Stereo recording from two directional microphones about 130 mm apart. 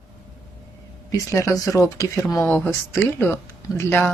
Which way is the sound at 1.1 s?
20° left (ahead or behind).